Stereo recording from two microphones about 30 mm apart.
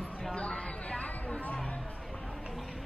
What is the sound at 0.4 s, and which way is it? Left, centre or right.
Chatter, left.